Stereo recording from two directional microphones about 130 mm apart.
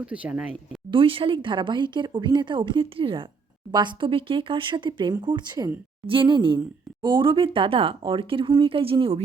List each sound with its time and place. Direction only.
0.0 s speech: 10° right (ahead or behind)
0.9 s speech: 45° right (ahead or behind)